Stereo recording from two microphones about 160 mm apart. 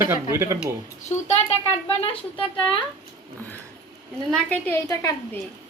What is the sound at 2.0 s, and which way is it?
Speech, 35° left (ahead or behind).